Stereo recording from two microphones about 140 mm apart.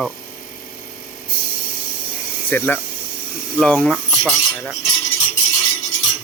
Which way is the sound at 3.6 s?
5° left (ahead or behind).